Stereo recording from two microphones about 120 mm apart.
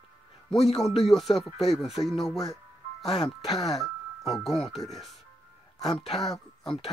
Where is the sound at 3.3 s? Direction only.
30° left (ahead or behind).